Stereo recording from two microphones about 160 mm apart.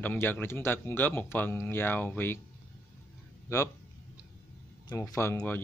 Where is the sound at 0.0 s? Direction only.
10° left (ahead or behind).